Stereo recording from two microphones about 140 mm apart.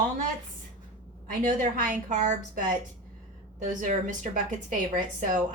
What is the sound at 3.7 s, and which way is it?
Speech, 65° right (ahead or behind).